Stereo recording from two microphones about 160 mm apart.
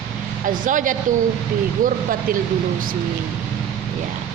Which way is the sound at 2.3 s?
60° right (ahead or behind).